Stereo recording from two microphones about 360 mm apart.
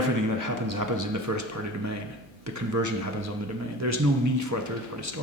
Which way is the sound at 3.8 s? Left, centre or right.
Right.